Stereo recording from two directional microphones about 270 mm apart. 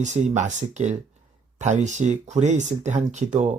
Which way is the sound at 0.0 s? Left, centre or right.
Right.